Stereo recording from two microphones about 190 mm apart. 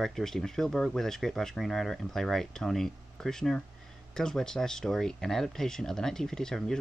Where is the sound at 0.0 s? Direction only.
Centre (ahead or behind).